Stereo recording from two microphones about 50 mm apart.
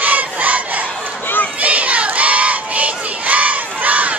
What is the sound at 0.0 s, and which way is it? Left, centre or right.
Fowl, right.